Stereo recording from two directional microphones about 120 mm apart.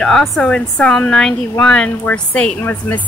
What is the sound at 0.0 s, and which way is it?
A woman's voice, centre (ahead or behind).